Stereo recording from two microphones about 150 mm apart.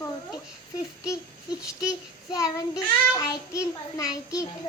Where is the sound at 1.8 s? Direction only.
25° left (ahead or behind).